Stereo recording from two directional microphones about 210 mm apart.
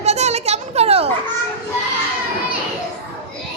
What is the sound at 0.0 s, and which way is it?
Children playing, 30° right (ahead or behind).